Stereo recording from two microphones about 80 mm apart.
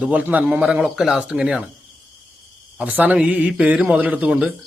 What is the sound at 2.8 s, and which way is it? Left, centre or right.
Speech, right.